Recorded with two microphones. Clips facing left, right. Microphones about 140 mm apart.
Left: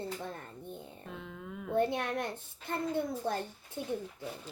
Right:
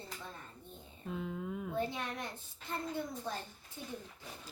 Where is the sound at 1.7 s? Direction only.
60° left (ahead or behind).